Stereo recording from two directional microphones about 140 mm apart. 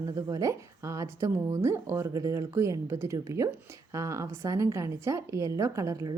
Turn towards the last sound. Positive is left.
turn(degrees=-25)  # may be behind; listen again after turning